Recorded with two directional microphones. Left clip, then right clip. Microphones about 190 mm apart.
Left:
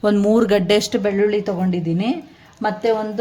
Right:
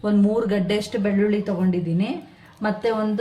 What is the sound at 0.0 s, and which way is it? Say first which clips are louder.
Speech: left 6 dB; 55° left (ahead or behind).